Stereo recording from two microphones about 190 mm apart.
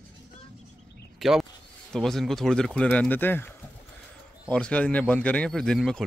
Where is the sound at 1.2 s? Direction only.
Centre (ahead or behind).